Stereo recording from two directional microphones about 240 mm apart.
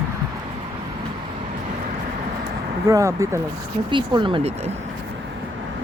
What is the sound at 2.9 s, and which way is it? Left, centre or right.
Speech, centre.